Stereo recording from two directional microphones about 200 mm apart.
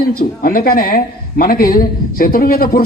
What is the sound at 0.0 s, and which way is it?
A man's voice, 45° left (ahead or behind).